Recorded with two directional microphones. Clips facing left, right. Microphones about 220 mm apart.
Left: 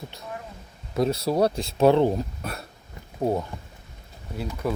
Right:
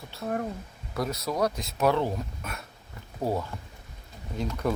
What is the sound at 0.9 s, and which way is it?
Speech, 30° left (ahead or behind).